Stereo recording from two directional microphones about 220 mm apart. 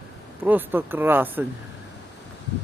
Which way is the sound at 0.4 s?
10° right (ahead or behind).